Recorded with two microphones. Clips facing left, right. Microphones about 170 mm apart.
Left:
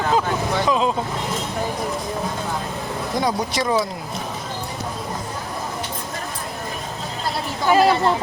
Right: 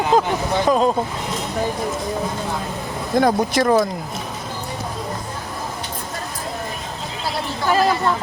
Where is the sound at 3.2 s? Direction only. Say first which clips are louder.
Right 6 dB; 50° right (ahead or behind).